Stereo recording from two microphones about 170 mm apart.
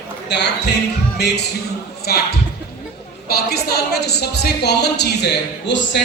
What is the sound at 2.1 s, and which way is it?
A woman's voice, 70° left (ahead or behind).